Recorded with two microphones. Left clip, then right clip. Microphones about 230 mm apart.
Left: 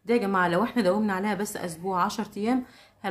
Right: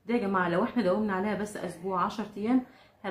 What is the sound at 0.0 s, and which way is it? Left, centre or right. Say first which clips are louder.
A woman's voice: left 5 dB; left.